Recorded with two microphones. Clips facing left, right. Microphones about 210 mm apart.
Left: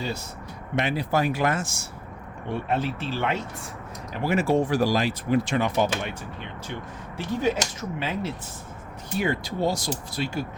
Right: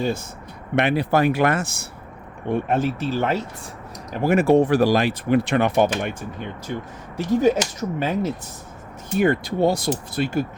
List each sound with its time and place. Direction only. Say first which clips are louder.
0.0 s speech: right 7 dB; 50° right (ahead or behind)
0.8 s speech: right 6 dB; 60° right (ahead or behind)
2.5 s speech: right 5 dB; 50° right (ahead or behind)